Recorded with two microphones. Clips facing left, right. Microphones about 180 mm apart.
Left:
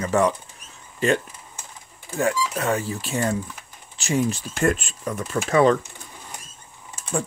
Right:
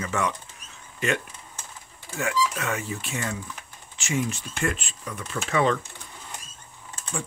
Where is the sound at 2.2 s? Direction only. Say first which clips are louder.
Left 3 dB; 35° left (ahead or behind).